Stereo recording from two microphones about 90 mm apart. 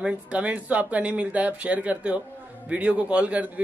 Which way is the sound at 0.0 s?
15° right (ahead or behind).